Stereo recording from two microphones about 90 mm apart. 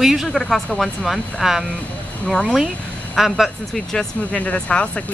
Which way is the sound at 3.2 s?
Centre (ahead or behind).